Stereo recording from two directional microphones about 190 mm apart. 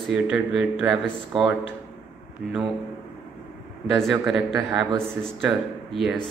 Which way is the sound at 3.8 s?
Centre (ahead or behind).